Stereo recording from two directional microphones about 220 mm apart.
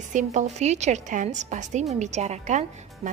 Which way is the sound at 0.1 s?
35° right (ahead or behind).